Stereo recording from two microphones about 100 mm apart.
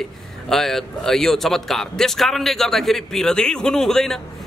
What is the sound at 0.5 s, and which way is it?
A man's voice, 5° left (ahead or behind).